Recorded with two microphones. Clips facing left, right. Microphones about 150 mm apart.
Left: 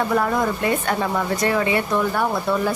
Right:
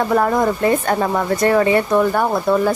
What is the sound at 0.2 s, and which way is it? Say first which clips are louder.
Speech: right 5 dB; 45° right (ahead or behind).